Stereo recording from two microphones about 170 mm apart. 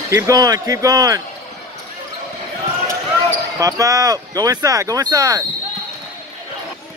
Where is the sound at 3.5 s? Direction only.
20° right (ahead or behind).